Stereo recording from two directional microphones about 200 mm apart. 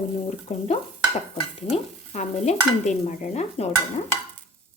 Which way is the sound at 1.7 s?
35° left (ahead or behind).